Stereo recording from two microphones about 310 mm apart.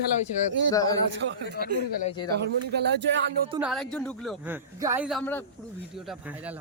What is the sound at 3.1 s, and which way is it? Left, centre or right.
Speech, right.